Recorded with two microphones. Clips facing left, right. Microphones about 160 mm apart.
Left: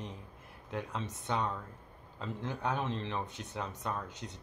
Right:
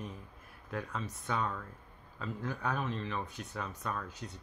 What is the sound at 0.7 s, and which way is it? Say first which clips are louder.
Speech: left 1 dB; 20° left (ahead or behind).